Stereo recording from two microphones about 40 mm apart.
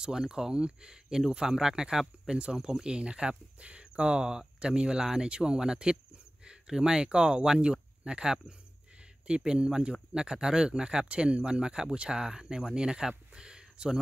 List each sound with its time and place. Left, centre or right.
0.0 s speech: centre
11.1 s speech: right
13.3 s a sound: right